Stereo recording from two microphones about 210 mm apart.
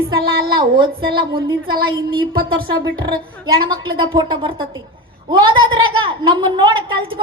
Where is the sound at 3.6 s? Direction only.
20° right (ahead or behind).